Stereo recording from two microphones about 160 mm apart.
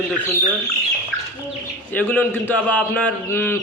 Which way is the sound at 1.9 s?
10° left (ahead or behind).